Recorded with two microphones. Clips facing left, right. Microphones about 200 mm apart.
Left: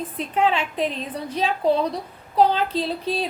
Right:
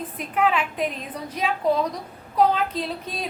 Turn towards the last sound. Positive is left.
turn(degrees=30)  # may be behind; listen again after turning